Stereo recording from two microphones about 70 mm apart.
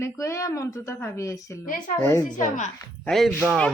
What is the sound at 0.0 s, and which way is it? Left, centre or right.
Speech, left.